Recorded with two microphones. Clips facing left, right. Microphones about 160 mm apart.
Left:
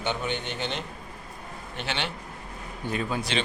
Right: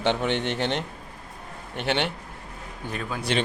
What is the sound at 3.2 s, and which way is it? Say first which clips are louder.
Speech: right 3 dB; 55° right (ahead or behind).